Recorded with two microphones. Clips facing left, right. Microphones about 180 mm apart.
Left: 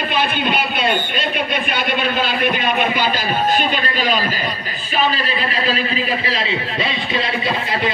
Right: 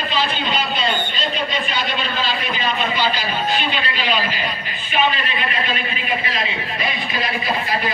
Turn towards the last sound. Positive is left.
turn(degrees=25)  # may be behind; listen again after turning